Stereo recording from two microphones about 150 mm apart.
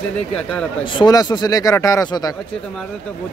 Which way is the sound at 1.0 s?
25° left (ahead or behind).